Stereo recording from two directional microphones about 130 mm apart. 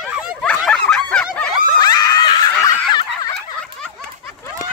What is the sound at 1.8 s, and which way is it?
Snicker, 30° left (ahead or behind).